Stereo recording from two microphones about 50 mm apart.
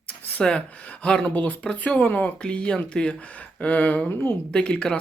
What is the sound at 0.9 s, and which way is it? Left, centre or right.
Speech, left.